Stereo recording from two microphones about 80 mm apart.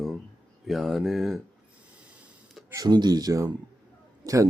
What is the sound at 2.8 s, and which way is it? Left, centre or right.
A man's voice, right.